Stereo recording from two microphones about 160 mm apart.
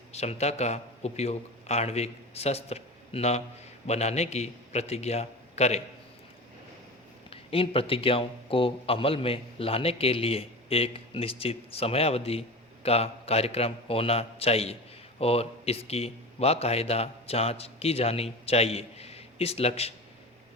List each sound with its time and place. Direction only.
0.1 s a man's voice: 40° left (ahead or behind)
7.3 s a man's voice: 35° left (ahead or behind)